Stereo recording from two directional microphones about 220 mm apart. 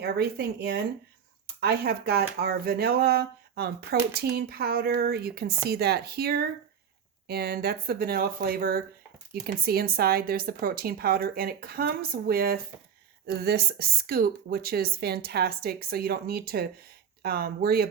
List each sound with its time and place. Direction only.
0.0 s speech: 45° right (ahead or behind)